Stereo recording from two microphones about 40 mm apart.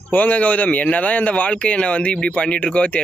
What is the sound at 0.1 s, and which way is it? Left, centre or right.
Speech, left.